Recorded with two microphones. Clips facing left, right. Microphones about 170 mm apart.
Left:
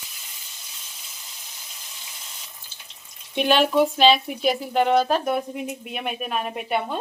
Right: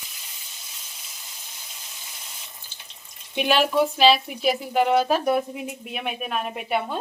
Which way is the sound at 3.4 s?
5° right (ahead or behind).